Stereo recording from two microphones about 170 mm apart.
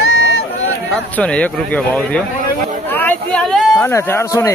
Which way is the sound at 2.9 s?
10° left (ahead or behind).